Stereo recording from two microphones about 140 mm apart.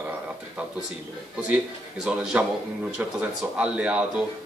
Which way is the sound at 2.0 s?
5° right (ahead or behind).